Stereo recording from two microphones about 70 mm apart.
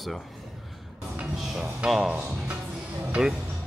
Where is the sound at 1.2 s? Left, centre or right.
Centre.